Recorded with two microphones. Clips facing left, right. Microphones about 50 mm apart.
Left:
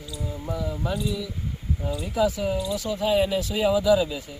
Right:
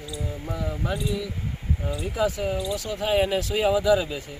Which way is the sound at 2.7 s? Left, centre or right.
Right.